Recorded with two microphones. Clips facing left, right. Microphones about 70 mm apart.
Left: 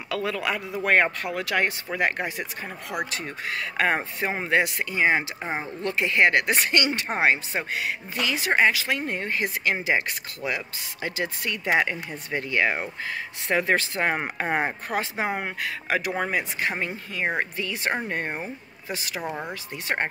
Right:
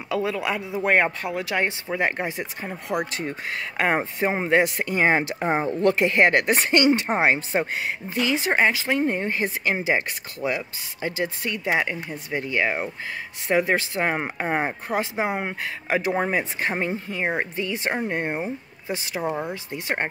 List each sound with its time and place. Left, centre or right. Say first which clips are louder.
0.1 s speech: right 2 dB; centre; by 5.7 s right
5.7 s a woman's voice: right 8 dB; right
6.0 s speech: left 2 dB; right